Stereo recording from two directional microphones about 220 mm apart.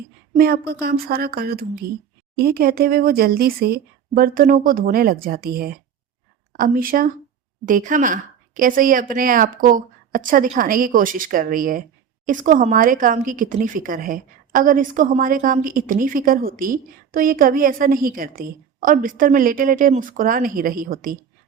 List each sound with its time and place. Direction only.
0.3 s speech: 45° right (ahead or behind)